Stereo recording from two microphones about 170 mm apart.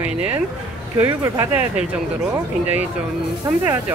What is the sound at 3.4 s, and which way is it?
Speech, 20° right (ahead or behind).